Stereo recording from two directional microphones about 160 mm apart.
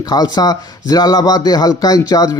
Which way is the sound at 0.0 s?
25° left (ahead or behind).